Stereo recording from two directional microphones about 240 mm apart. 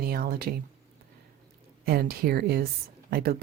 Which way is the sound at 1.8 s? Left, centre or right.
Right.